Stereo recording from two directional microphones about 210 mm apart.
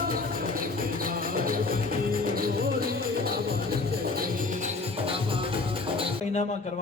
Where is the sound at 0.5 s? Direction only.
40° right (ahead or behind).